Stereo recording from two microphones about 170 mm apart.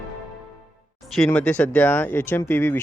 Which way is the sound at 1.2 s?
5° left (ahead or behind).